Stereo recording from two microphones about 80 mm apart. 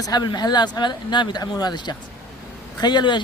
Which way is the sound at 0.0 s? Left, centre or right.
Left.